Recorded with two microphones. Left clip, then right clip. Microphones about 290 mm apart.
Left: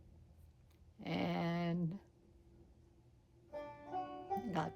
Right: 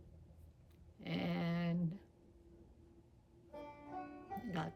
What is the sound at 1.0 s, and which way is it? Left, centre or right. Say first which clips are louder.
Dog: left 3 dB; centre.